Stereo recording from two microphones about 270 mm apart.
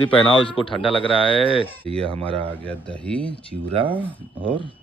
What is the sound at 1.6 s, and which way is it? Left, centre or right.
Speech, centre.